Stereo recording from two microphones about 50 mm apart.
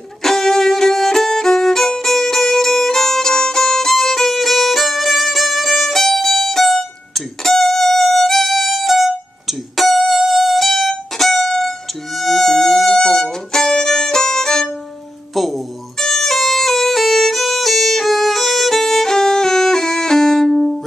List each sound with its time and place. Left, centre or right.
0.2 s violin: centre
15.3 s music: centre